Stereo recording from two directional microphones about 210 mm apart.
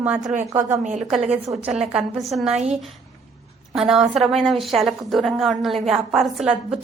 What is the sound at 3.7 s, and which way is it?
A woman's voice, centre (ahead or behind).